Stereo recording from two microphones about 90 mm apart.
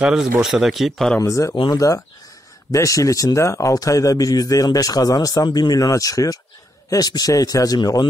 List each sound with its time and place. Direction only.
0.0 s speech: 5° right (ahead or behind)
1.2 s speech: 35° left (ahead or behind); by 8.1 s 50° left (ahead or behind)